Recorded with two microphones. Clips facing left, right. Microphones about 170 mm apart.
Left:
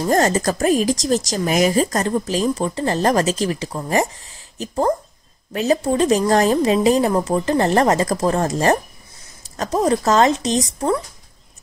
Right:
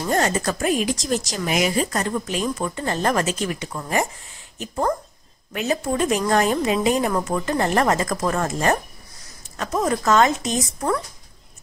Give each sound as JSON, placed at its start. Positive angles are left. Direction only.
{"t": 0.0, "sound": "speech", "side_deg": 35}